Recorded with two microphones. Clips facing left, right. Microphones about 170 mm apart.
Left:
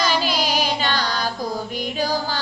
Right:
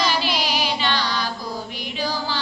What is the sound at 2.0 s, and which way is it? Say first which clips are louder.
Music: left 2 dB; 45° left (ahead or behind).